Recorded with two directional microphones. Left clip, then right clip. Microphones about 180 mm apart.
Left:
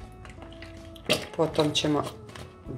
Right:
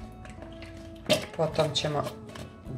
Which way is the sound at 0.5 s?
5° right (ahead or behind).